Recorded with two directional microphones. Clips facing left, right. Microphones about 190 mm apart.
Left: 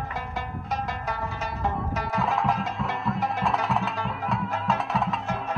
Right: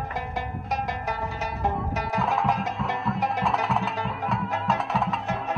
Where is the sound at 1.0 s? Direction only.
15° right (ahead or behind).